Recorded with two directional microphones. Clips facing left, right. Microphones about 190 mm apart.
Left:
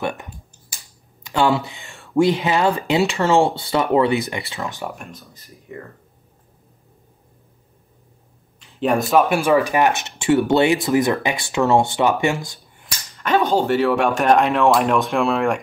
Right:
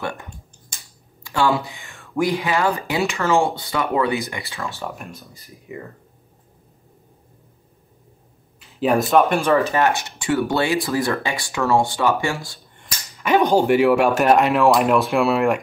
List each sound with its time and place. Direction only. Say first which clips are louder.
1.2 s speech: left 2 dB; 20° left (ahead or behind)
5.1 s speech: right 1 dB; 10° right (ahead or behind)
8.5 s speech: right 1 dB; 5° right (ahead or behind)
9.4 s speech: left 1 dB; 10° left (ahead or behind)
13.2 s speech: right 2 dB; 15° right (ahead or behind)